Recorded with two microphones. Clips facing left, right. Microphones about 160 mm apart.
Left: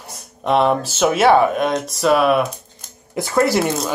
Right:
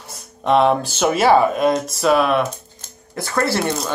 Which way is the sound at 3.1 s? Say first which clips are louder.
Left 4 dB; 15° left (ahead or behind).